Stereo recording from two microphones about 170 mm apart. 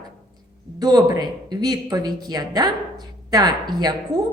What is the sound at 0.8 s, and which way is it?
Speech, 20° right (ahead or behind).